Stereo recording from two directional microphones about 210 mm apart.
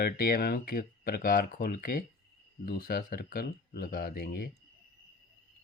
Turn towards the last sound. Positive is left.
turn(degrees=45)  # may be behind; listen again after turning